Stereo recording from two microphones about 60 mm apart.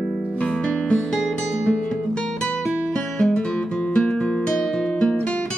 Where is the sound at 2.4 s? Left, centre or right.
Centre.